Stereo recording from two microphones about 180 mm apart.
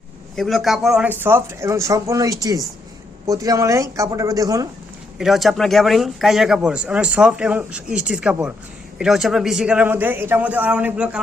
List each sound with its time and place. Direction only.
0.3 s speech: centre (ahead or behind)
1.2 s a man's voice: 15° right (ahead or behind)
5.1 s a man's voice: centre (ahead or behind)